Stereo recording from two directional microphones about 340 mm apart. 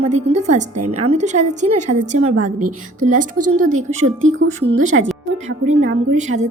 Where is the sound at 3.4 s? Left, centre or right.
Right.